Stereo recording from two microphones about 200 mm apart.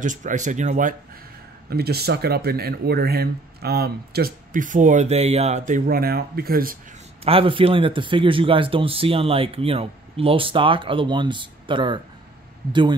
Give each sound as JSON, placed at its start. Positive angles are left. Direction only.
{"t": 0.0, "sound": "speech", "side_deg": -40}
{"t": 1.7, "sound": "speech", "side_deg": -50}
{"t": 7.2, "sound": "speech", "side_deg": -25}